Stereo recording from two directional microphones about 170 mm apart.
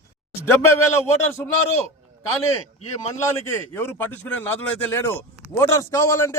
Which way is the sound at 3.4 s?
15° left (ahead or behind).